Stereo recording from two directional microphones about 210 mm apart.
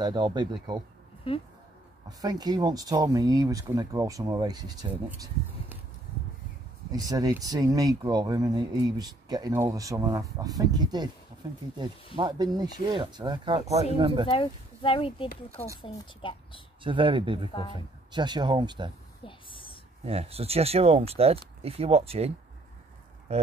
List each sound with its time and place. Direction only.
0.0 s speech: 20° right (ahead or behind)
1.3 s speech: 25° left (ahead or behind)
2.0 s speech: 20° right (ahead or behind)
6.9 s speech: 15° right (ahead or behind)
14.3 s speech: 25° left (ahead or behind)
16.8 s speech: 25° right (ahead or behind)
17.5 s speech: 25° left (ahead or behind)
17.7 s speech: 20° right (ahead or behind)
19.2 s a sound: 25° left (ahead or behind)
20.1 s speech: 30° right (ahead or behind)